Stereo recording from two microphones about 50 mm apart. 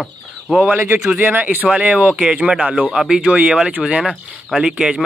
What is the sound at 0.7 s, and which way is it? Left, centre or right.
Speech, right.